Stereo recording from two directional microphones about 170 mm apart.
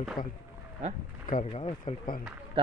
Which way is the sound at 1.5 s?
35° left (ahead or behind).